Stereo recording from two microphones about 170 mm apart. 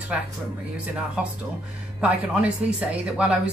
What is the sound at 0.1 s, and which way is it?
Speech, 5° right (ahead or behind).